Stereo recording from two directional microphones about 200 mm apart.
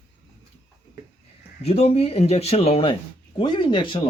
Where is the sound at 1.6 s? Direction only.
30° left (ahead or behind).